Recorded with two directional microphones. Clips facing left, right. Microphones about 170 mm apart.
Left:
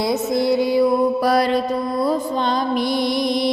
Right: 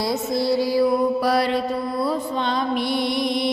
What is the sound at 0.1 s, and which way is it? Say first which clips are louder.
Music: left 3 dB; 20° left (ahead or behind).